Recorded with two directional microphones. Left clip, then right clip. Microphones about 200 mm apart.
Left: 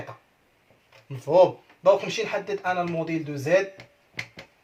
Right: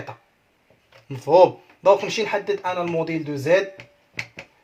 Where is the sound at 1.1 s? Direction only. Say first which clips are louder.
Right 4 dB; 50° right (ahead or behind).